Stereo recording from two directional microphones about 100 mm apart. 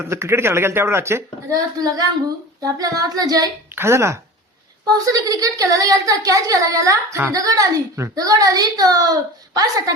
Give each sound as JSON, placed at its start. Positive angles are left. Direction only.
{"t": 0.0, "sound": "a woman's voice", "side_deg": -25}
{"t": 3.8, "sound": "a woman's voice", "side_deg": -25}